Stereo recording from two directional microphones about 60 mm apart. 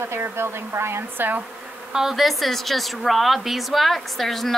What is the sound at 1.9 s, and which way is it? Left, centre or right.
A woman's voice, centre.